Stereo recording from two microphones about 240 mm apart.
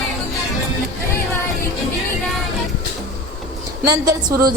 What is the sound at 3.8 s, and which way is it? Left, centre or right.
Speech, centre.